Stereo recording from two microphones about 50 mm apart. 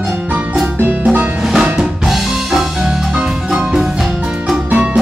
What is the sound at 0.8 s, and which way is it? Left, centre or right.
Music, right.